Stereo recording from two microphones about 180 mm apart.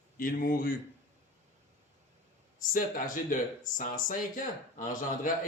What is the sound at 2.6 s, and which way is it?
Speech, 50° left (ahead or behind).